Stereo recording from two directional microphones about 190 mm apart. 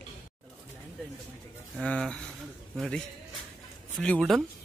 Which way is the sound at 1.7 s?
5° left (ahead or behind).